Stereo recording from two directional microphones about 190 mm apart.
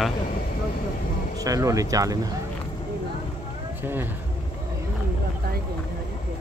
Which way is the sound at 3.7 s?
10° right (ahead or behind).